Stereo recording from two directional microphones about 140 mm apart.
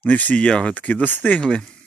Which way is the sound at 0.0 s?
10° left (ahead or behind).